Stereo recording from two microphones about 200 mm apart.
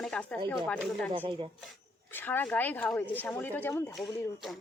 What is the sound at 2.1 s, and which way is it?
Speech, 10° left (ahead or behind).